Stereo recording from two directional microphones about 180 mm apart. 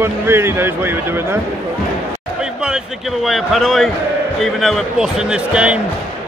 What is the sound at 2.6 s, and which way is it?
Speech, centre (ahead or behind).